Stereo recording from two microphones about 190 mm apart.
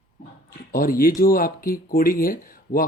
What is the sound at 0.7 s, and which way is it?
Speech, 50° left (ahead or behind).